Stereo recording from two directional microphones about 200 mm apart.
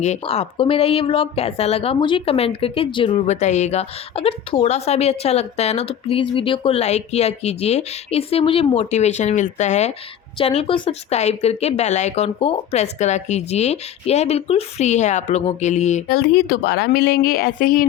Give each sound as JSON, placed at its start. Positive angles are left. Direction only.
{"t": 0.0, "sound": "speech", "side_deg": 35}